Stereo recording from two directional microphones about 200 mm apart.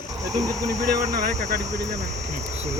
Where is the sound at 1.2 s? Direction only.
35° right (ahead or behind).